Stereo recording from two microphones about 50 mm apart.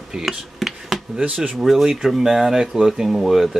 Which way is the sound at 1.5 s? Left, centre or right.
Centre.